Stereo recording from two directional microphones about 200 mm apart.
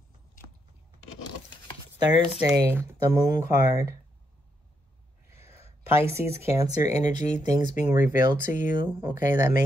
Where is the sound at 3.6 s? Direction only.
15° right (ahead or behind).